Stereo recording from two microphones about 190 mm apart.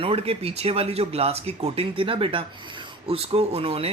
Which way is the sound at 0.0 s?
30° right (ahead or behind).